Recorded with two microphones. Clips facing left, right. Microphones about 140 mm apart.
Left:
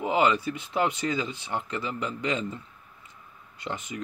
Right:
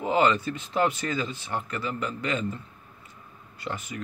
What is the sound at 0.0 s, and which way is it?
Speech, 15° left (ahead or behind).